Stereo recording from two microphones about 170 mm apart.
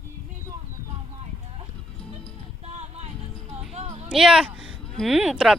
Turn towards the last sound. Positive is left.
turn(degrees=-5)  # may be behind; listen again after turning